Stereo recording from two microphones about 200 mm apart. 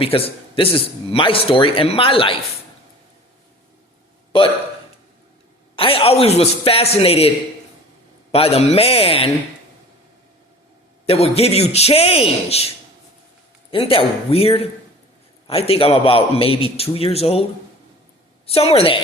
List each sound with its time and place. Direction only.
0.0 s speech: 30° left (ahead or behind)
5.7 s speech: 30° left (ahead or behind)
11.0 s a man's voice: 30° left (ahead or behind)
13.7 s speech: 25° left (ahead or behind)
18.4 s speech: 30° left (ahead or behind)